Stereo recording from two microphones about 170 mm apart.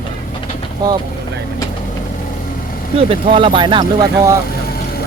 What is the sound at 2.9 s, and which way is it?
Speech, 30° right (ahead or behind).